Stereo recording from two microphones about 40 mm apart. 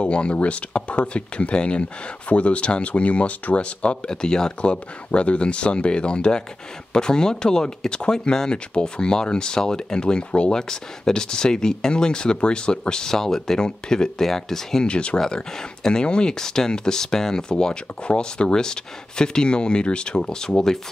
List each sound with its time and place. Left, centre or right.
0.0 s speech: left
4.1 s speech: centre
13.6 s speech: left
14.9 s speech: left